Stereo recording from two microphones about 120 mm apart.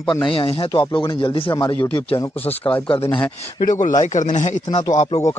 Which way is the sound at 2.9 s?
45° left (ahead or behind).